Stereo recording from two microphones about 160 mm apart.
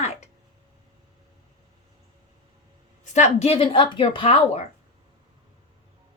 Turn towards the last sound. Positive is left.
turn(degrees=40)  # may be behind; listen again after turning